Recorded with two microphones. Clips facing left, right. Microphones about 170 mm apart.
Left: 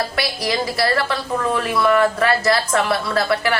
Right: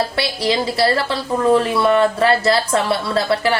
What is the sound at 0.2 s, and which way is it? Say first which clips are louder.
A woman's voice: right 3 dB; 25° right (ahead or behind).